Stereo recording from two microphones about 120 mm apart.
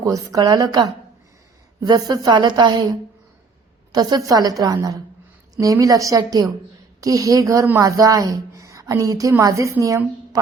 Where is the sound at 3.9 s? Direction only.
35° right (ahead or behind).